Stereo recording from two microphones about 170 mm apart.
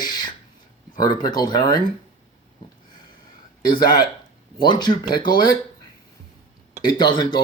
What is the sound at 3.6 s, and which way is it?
Speech, 25° left (ahead or behind).